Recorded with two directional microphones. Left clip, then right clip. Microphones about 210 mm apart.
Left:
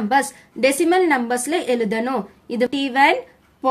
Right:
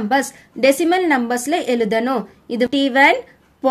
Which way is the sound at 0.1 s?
10° right (ahead or behind).